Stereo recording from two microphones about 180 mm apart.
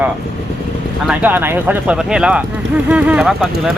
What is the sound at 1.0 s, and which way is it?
Speech, 10° right (ahead or behind).